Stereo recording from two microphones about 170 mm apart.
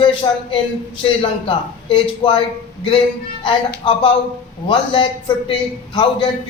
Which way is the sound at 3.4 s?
30° left (ahead or behind).